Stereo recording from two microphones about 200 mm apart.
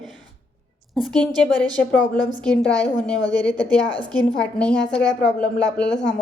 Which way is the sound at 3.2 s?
20° right (ahead or behind).